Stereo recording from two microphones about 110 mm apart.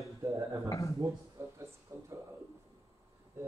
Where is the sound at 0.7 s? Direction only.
30° left (ahead or behind).